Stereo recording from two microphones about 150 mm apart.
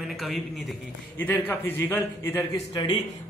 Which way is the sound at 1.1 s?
10° left (ahead or behind).